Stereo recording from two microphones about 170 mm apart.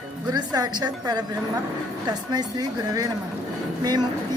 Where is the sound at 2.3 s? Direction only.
25° right (ahead or behind).